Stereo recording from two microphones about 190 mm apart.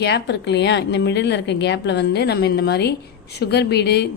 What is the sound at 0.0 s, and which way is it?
A woman's voice, 60° left (ahead or behind).